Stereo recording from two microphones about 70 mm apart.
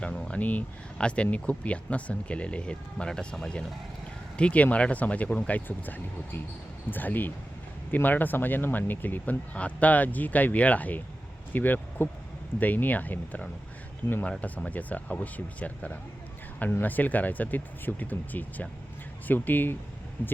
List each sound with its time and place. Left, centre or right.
0.0 s speech: centre
4.4 s speech: centre